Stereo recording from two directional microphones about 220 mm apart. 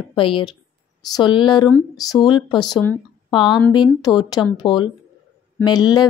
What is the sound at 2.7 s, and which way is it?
Speech, 10° left (ahead or behind).